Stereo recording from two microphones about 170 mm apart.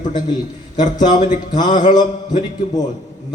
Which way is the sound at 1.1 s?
45° left (ahead or behind).